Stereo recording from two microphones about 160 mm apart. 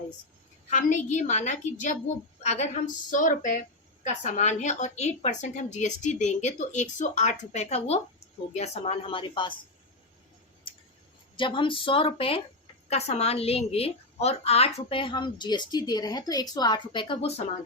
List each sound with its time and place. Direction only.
0.7 s a woman's voice: 50° left (ahead or behind); by 9.6 s 30° left (ahead or behind)
11.3 s a woman's voice: 30° left (ahead or behind)